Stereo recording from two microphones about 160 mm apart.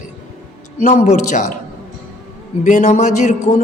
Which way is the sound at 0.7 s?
45° left (ahead or behind).